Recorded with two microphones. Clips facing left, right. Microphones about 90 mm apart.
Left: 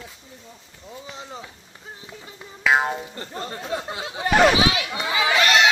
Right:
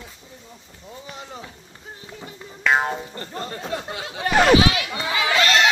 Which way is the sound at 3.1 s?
15° left (ahead or behind).